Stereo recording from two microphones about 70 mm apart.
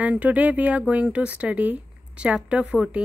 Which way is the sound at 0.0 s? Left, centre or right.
Right.